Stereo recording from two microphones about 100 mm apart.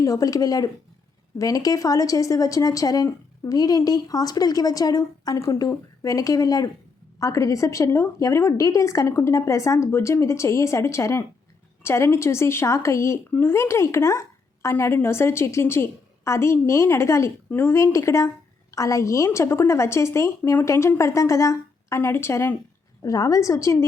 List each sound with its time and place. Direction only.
0.0 s a woman's voice: 35° left (ahead or behind)